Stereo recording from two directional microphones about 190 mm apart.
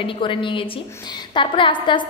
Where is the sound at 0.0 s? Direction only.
25° left (ahead or behind).